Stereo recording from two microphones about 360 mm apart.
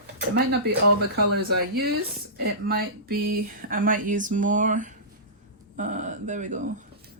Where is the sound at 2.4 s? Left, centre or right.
Right.